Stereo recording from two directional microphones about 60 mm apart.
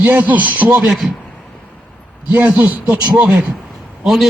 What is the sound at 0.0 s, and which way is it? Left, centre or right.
Speech, right.